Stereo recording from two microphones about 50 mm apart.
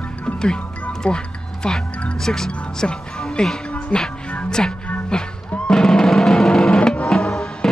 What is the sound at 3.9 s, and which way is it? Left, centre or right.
Music, centre.